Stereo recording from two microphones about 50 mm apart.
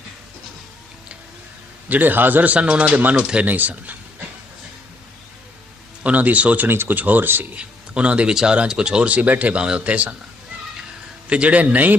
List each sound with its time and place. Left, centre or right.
1.9 s a man's voice: right
6.0 s a man's voice: right
6.7 s speech: right
7.5 s a man's voice: right
11.3 s a man's voice: right